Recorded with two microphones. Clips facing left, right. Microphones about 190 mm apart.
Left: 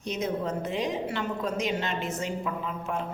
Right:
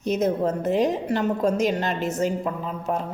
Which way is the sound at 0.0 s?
45° right (ahead or behind).